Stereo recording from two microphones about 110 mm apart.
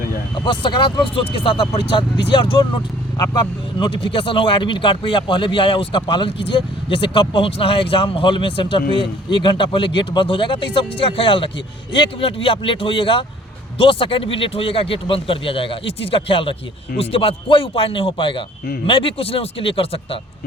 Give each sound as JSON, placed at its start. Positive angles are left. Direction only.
{"t": 0.3, "sound": "speech", "side_deg": 45}
{"t": 2.0, "sound": "speech", "side_deg": 45}